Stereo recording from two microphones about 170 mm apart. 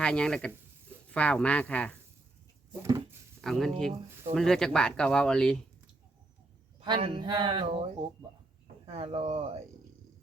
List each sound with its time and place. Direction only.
0.0 s speech: 5° left (ahead or behind)
2.8 s a sound: 20° right (ahead or behind)
3.4 s speech: centre (ahead or behind)
6.7 s speech: 30° right (ahead or behind)